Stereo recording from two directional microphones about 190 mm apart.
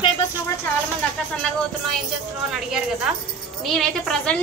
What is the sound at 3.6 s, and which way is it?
Speech, centre (ahead or behind).